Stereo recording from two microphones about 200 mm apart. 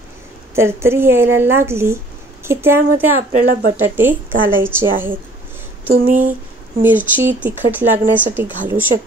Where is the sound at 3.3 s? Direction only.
45° right (ahead or behind).